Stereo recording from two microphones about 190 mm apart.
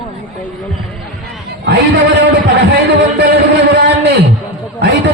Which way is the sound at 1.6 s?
60° right (ahead or behind).